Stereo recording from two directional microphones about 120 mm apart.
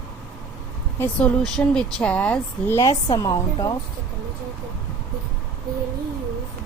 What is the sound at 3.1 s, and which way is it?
Speech, 30° left (ahead or behind).